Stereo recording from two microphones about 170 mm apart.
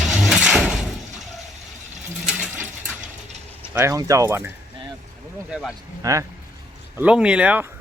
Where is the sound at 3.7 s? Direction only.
15° right (ahead or behind).